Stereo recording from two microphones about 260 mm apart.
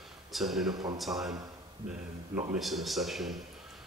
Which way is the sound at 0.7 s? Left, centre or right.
Centre.